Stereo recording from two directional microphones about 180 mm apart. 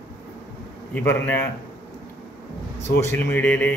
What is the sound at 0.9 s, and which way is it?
Speech, 10° left (ahead or behind).